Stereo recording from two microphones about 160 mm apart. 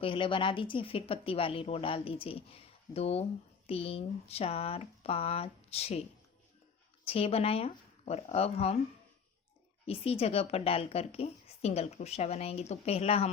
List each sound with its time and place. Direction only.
0.0 s speech: 30° left (ahead or behind)
7.0 s speech: 35° left (ahead or behind)
9.8 s speech: 40° left (ahead or behind)